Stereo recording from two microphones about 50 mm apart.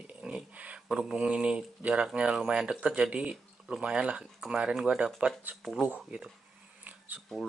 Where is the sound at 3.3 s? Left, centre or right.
Centre.